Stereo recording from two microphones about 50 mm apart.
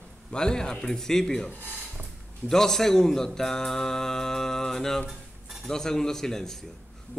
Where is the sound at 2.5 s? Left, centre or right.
Centre.